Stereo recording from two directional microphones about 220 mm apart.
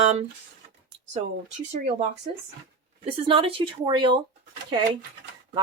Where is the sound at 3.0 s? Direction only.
25° right (ahead or behind).